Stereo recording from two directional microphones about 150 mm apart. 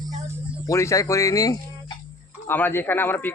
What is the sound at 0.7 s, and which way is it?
A man's voice, 20° left (ahead or behind).